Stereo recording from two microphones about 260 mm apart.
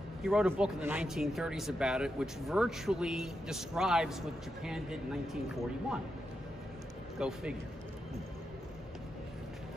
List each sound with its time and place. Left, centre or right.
0.2 s speech: centre
7.2 s speech: centre